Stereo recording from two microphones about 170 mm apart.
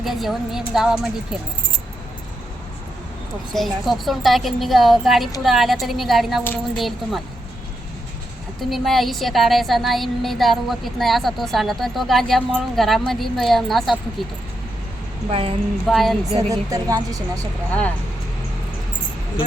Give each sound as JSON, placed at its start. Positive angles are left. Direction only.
{"t": 0.0, "sound": "a woman's voice", "side_deg": 0}
{"t": 3.5, "sound": "a woman's voice", "side_deg": 0}
{"t": 6.4, "sound": "speech", "side_deg": 10}
{"t": 8.7, "sound": "a woman's voice", "side_deg": 0}
{"t": 15.3, "sound": "a woman's voice", "side_deg": -35}
{"t": 15.9, "sound": "a woman's voice", "side_deg": 0}
{"t": 16.5, "sound": "a woman's voice", "side_deg": -20}
{"t": 17.7, "sound": "speech", "side_deg": 10}